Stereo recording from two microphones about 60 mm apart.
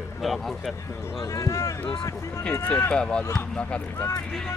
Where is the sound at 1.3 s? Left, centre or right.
Left.